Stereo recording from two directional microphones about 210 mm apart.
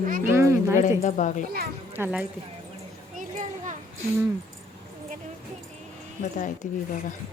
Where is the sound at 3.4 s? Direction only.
35° right (ahead or behind).